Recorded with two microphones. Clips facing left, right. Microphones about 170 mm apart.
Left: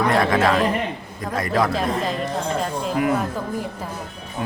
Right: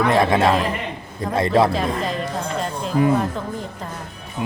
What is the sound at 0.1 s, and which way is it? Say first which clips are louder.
A man's voice: right 2 dB; 25° right (ahead or behind).